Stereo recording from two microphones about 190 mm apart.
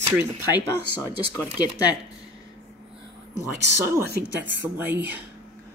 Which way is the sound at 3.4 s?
15° right (ahead or behind).